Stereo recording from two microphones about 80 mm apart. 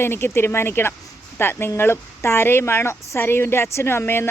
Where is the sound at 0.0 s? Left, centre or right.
Left.